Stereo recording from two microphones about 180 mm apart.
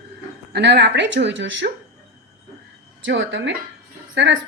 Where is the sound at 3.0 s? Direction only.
90° right.